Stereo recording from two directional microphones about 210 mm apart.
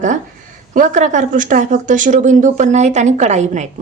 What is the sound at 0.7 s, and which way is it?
A woman's voice, 35° right (ahead or behind).